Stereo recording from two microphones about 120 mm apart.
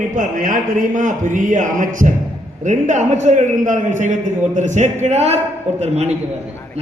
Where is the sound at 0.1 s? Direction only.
90° right.